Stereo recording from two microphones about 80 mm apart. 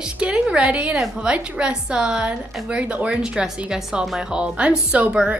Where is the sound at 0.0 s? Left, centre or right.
Centre.